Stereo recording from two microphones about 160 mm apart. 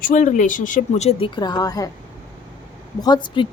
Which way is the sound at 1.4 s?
25° left (ahead or behind).